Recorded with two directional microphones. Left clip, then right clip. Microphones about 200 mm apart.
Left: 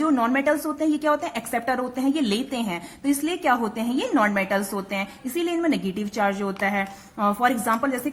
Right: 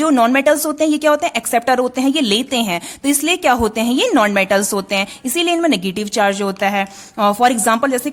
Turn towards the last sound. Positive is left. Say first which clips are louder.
# right 8 dB
turn(degrees=-45)  # may be behind; listen again after turning